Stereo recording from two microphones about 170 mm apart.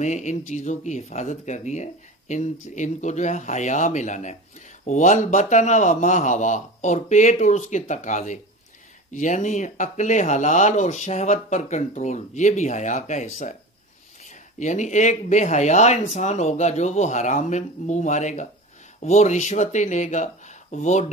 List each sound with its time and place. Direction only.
0.0 s speech: 45° left (ahead or behind)